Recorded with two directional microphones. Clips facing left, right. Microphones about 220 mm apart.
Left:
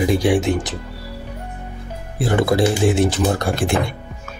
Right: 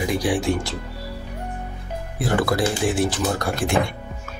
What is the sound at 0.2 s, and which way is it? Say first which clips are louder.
Speech: left 4 dB; 20° left (ahead or behind).